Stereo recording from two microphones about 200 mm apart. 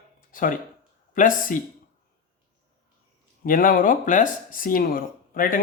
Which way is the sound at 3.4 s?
45° left (ahead or behind).